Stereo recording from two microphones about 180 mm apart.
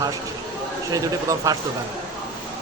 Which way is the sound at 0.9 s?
20° right (ahead or behind).